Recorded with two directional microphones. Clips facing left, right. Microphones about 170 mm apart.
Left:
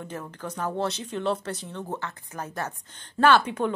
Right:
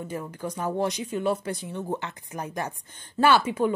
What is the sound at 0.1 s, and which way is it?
A woman's voice, 10° right (ahead or behind).